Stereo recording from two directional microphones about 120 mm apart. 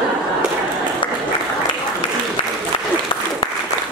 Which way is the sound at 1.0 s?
45° left (ahead or behind).